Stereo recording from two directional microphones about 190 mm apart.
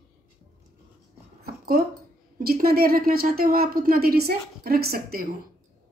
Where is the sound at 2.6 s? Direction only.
50° right (ahead or behind).